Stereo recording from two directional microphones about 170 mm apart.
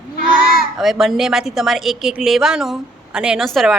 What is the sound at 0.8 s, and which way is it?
A woman's voice, centre (ahead or behind).